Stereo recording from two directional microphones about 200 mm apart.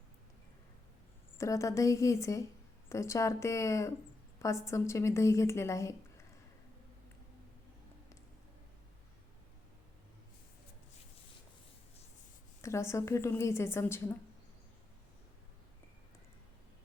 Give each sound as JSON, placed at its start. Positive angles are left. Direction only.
{"t": 1.4, "sound": "a woman's voice", "side_deg": 15}
{"t": 12.6, "sound": "a woman's voice", "side_deg": 15}